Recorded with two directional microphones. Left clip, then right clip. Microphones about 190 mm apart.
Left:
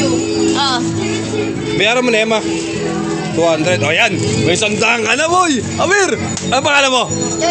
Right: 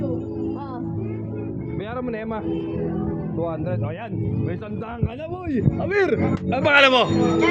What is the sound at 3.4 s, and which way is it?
Speech, 35° left (ahead or behind).